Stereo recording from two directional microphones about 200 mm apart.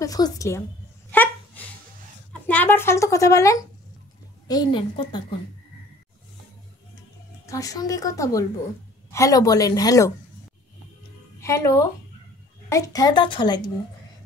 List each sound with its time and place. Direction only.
0.0 s a woman's voice: 15° left (ahead or behind)
1.1 s a sound: 10° left (ahead or behind)
2.4 s a woman's voice: 10° left (ahead or behind); by 5.2 s 25° left (ahead or behind)
7.4 s a woman's voice: 15° left (ahead or behind)
11.4 s a woman's voice: 15° left (ahead or behind)